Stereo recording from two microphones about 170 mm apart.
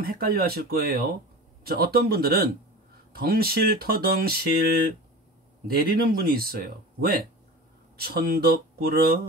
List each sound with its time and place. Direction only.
0.0 s speech: 60° right (ahead or behind)